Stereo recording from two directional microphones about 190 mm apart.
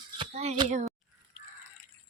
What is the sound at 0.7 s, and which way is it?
Speech, 40° right (ahead or behind).